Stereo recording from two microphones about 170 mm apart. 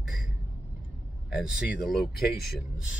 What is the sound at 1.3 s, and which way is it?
Speech, 5° right (ahead or behind).